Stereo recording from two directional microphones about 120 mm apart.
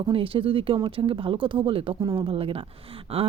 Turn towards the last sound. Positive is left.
turn(degrees=-55)  # may be behind; listen again after turning